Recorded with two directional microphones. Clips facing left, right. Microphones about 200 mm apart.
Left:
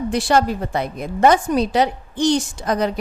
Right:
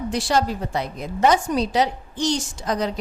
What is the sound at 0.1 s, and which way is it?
A woman's voice, 55° left (ahead or behind).